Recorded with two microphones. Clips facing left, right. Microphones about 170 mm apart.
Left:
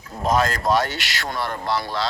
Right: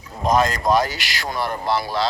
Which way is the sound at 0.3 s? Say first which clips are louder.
Right 2 dB; centre (ahead or behind).